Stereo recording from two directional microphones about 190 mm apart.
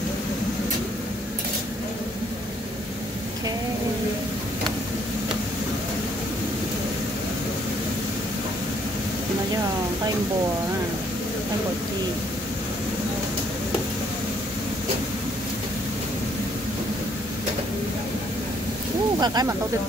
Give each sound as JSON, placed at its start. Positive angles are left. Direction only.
{"t": 19.1, "sound": "speech", "side_deg": -20}